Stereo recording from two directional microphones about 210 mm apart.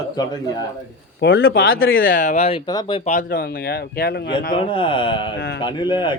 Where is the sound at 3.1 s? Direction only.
40° left (ahead or behind).